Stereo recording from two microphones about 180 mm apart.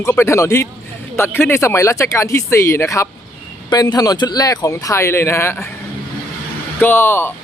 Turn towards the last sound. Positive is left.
turn(degrees=10)  # may be behind; listen again after turning